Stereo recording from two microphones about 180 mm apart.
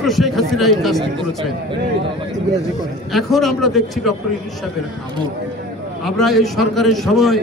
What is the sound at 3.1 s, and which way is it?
A man's voice, centre (ahead or behind).